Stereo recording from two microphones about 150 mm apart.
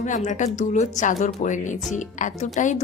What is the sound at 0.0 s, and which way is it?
A woman's voice, 55° left (ahead or behind).